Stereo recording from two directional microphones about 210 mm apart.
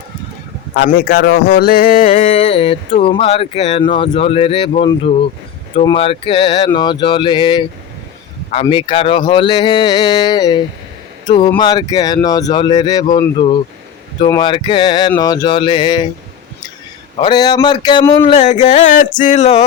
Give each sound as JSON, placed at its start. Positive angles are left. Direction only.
{"t": 0.8, "sound": "a man's voice", "side_deg": 45}
{"t": 2.2, "sound": "speech", "side_deg": 25}
{"t": 8.6, "sound": "speech", "side_deg": 25}
{"t": 17.2, "sound": "speech", "side_deg": 20}
{"t": 18.3, "sound": "speech", "side_deg": 35}